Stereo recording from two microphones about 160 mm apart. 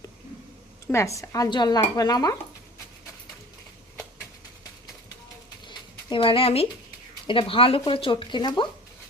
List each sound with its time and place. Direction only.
0.9 s speech: 20° left (ahead or behind)
5.6 s a sound: 30° left (ahead or behind)
7.3 s speech: 35° left (ahead or behind)